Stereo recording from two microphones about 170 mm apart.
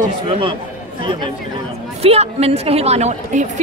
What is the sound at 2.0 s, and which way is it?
Speech, 35° right (ahead or behind).